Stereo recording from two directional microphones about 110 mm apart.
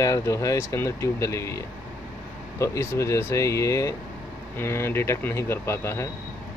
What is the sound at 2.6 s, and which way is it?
Speech, 25° left (ahead or behind).